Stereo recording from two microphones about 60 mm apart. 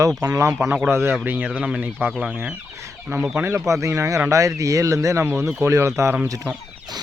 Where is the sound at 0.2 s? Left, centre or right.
Right.